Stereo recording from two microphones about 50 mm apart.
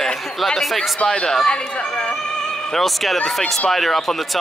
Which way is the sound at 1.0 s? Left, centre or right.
Centre.